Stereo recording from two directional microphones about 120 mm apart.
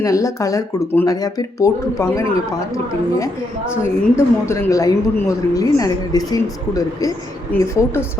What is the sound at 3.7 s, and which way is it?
Speech, 20° left (ahead or behind).